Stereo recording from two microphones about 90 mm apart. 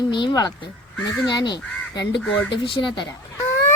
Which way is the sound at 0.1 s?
60° left (ahead or behind).